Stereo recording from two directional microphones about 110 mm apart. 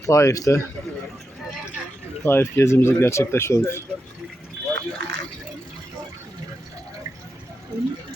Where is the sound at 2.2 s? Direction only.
20° left (ahead or behind).